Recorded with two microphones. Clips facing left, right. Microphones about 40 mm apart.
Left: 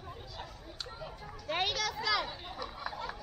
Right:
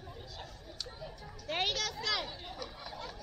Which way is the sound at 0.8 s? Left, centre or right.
Centre.